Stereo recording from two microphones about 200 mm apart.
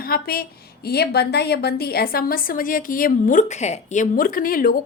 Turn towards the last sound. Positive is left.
turn(degrees=45)  # may be behind; listen again after turning